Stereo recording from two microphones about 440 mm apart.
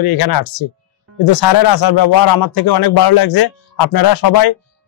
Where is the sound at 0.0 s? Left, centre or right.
Left.